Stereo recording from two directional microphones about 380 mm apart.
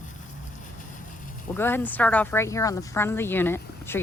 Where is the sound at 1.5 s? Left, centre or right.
Centre.